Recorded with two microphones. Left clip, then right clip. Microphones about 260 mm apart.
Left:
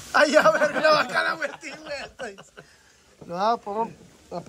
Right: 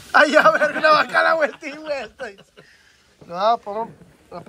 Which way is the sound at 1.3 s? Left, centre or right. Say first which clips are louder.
Right 9 dB; centre.